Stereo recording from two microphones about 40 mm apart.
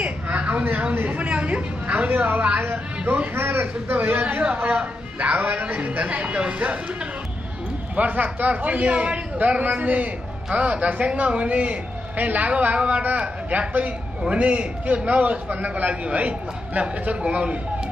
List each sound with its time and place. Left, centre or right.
0.0 s a sound: right
1.0 s a man's voice: right
2.0 s speech: right
3.3 s speech: right
5.2 s a man's voice: right
7.9 s a man's voice: right